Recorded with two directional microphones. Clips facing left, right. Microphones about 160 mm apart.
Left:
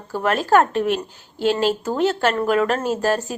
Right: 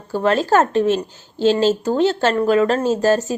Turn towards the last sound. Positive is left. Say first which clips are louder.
# right 4 dB
turn(degrees=-20)  # may be behind; listen again after turning